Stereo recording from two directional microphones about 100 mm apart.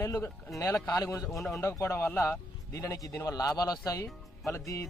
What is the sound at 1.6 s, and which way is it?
Speech, 25° left (ahead or behind).